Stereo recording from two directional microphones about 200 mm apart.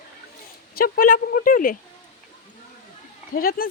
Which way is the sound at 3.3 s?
45° left (ahead or behind).